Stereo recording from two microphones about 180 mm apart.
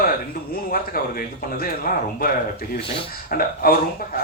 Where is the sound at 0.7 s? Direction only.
55° left (ahead or behind).